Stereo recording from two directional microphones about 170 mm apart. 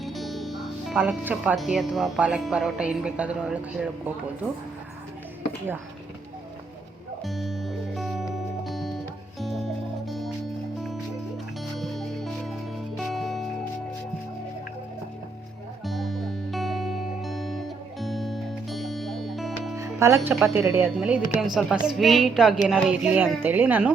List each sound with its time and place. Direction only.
0.0 s music: centre (ahead or behind)
0.9 s speech: 10° right (ahead or behind)
7.3 s music: centre (ahead or behind)
11.8 s music: centre (ahead or behind)
15.8 s music: centre (ahead or behind)
19.7 s music: 15° right (ahead or behind)
20.4 s speech: 15° right (ahead or behind)